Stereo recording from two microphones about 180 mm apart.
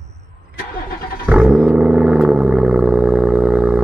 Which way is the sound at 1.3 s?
5° right (ahead or behind).